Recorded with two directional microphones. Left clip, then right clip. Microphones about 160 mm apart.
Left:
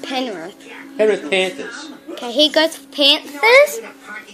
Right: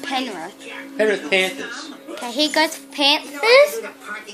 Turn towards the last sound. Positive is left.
turn(degrees=15)  # may be behind; listen again after turning